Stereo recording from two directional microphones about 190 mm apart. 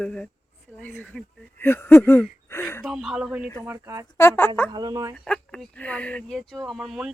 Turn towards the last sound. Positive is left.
turn(degrees=0)  # may be behind; listen again after turning